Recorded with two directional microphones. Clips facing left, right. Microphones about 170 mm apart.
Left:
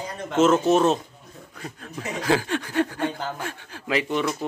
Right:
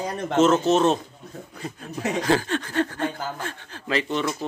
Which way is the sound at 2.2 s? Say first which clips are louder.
Even; 10° left (ahead or behind).